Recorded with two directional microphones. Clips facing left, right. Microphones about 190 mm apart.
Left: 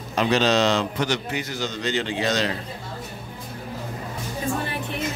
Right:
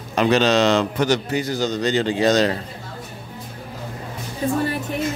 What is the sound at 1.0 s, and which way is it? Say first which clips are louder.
A man's voice: right 6 dB; 40° right (ahead or behind).